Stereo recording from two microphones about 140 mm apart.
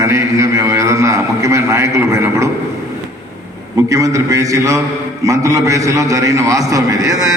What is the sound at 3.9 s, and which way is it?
A man's voice, 25° right (ahead or behind).